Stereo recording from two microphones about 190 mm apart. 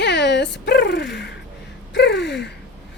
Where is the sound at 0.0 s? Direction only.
65° left (ahead or behind).